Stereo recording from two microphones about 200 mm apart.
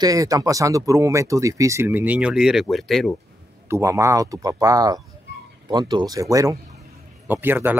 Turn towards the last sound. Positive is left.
turn(degrees=-10)  # may be behind; listen again after turning